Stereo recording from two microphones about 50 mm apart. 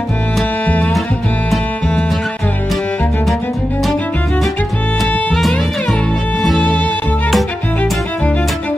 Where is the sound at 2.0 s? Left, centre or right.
Centre.